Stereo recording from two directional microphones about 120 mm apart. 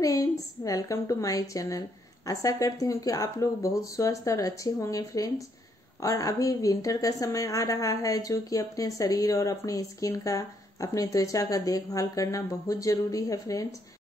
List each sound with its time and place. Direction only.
0.0 s a woman's voice: 30° left (ahead or behind)